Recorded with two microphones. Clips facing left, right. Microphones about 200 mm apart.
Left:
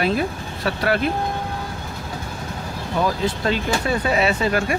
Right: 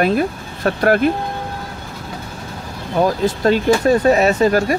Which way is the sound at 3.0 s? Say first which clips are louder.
Right 7 dB; 45° right (ahead or behind).